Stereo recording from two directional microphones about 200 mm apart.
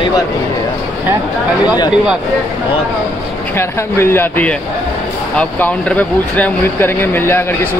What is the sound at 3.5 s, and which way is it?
Speech, 10° left (ahead or behind).